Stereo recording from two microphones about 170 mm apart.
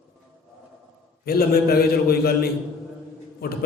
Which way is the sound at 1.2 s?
65° left (ahead or behind).